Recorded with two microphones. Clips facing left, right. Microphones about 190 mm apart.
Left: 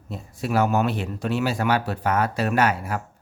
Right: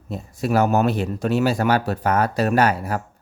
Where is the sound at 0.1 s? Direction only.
45° right (ahead or behind).